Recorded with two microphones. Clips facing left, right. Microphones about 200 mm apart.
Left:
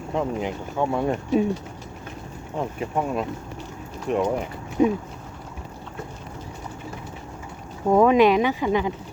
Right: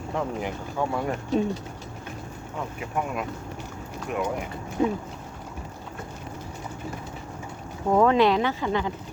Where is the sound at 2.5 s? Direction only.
30° left (ahead or behind).